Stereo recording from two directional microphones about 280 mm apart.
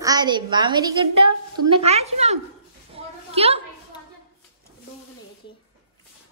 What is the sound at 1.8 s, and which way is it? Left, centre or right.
Speech, right.